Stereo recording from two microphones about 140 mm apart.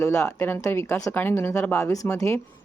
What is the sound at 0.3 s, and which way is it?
Speech, 15° left (ahead or behind).